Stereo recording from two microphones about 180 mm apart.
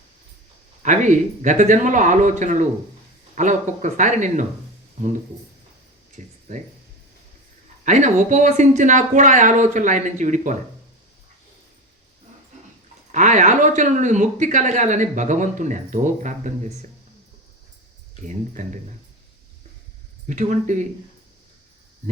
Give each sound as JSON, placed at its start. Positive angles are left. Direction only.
{"t": 0.8, "sound": "speech", "side_deg": -40}
{"t": 6.2, "sound": "speech", "side_deg": -45}
{"t": 7.9, "sound": "speech", "side_deg": -40}
{"t": 13.1, "sound": "speech", "side_deg": -40}
{"t": 18.3, "sound": "speech", "side_deg": -45}
{"t": 20.2, "sound": "speech", "side_deg": -45}